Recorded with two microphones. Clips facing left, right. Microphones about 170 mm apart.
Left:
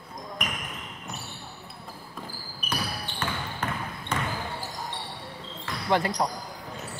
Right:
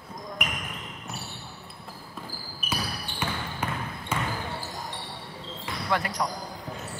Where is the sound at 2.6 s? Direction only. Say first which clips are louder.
Even; 5° right (ahead or behind).